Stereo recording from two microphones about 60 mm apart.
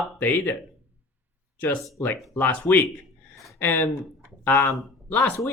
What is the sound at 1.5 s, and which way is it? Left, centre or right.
Speech, left.